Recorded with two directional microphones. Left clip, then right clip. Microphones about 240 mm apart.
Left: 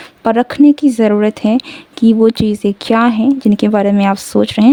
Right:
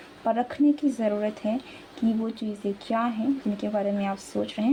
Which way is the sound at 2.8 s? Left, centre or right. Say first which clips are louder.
Left 15 dB; left.